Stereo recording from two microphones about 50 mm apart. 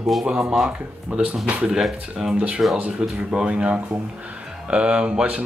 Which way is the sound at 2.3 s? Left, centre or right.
Right.